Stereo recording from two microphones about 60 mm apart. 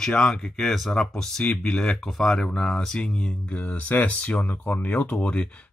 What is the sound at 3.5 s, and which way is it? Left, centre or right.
Speech, left.